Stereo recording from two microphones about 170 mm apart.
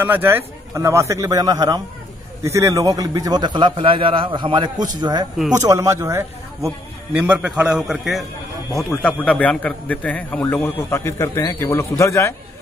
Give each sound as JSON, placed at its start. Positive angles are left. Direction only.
{"t": 0.0, "sound": "a man's voice", "side_deg": -10}